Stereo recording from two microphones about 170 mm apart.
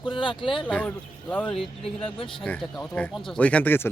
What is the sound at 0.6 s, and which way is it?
Speech, 10° left (ahead or behind).